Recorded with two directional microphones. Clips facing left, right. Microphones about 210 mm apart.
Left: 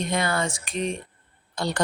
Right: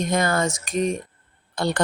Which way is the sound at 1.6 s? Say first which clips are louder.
Right 3 dB; 55° right (ahead or behind).